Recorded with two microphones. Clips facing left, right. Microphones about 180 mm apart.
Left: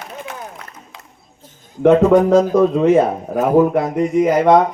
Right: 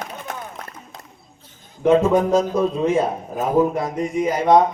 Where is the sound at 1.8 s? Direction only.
65° left (ahead or behind).